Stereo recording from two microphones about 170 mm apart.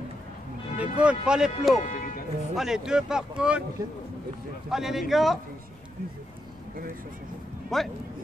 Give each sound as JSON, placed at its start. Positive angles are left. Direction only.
{"t": 0.7, "sound": "speech", "side_deg": -5}
{"t": 1.9, "sound": "music", "side_deg": 55}
{"t": 2.5, "sound": "speech", "side_deg": -5}
{"t": 4.6, "sound": "speech", "side_deg": -5}
{"t": 7.7, "sound": "speech", "side_deg": 0}